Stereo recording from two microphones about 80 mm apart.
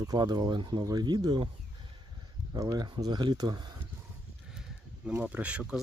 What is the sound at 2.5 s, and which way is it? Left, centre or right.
Speech, right.